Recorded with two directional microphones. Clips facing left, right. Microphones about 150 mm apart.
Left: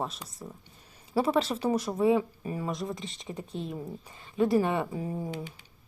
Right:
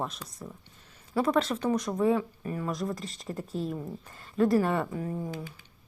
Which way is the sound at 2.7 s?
Centre (ahead or behind).